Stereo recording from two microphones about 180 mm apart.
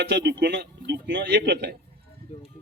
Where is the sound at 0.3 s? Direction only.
65° right (ahead or behind).